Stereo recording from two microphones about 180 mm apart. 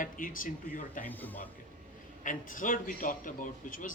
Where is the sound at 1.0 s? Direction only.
10° left (ahead or behind).